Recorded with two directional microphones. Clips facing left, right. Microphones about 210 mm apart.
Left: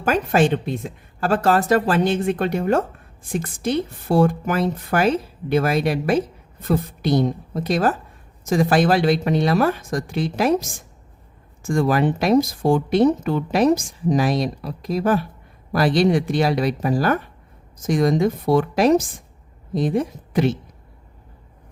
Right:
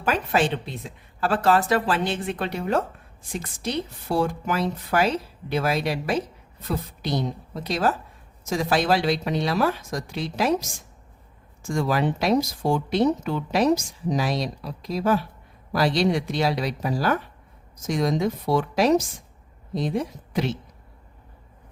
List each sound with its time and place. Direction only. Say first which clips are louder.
0.0 s speech: left 5 dB; 45° left (ahead or behind)
11.6 s speech: left 5 dB; 50° left (ahead or behind)